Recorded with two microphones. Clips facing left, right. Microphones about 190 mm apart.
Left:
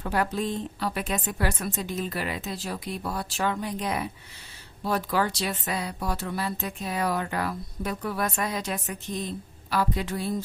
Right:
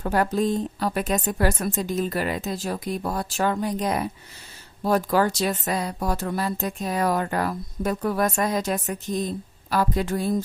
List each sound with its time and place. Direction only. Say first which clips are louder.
0.0 s speech: right 5 dB; 40° right (ahead or behind)